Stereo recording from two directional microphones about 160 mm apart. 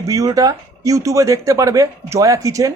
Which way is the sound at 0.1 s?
20° right (ahead or behind).